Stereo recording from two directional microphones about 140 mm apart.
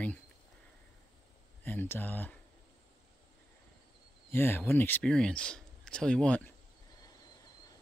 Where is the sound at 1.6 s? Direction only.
15° left (ahead or behind).